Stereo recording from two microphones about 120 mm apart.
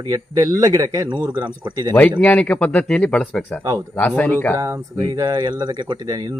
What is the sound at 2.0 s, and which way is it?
Speech, 15° left (ahead or behind).